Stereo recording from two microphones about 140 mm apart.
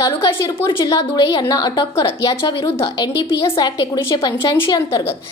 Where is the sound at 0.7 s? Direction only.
25° left (ahead or behind).